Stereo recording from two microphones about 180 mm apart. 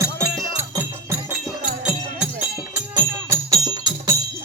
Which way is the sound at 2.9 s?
20° right (ahead or behind).